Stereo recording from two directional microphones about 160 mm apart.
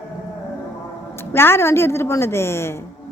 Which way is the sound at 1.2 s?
15° left (ahead or behind).